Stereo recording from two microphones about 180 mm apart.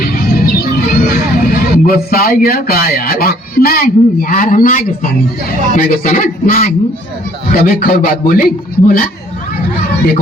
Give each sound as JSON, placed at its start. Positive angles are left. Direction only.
{"t": 0.0, "sound": "music", "side_deg": 55}
{"t": 1.0, "sound": "a man's voice", "side_deg": 55}